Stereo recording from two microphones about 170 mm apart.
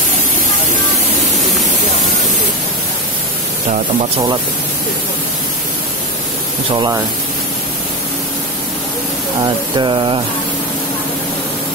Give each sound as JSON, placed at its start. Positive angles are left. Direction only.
{"t": 6.7, "sound": "speech", "side_deg": -30}
{"t": 9.8, "sound": "speech", "side_deg": -30}